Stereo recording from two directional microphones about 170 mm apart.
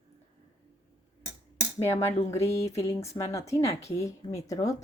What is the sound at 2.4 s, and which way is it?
A woman's voice, 15° left (ahead or behind).